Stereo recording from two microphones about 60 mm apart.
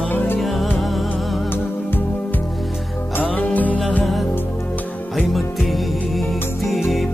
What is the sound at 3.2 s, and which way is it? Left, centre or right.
Music, left.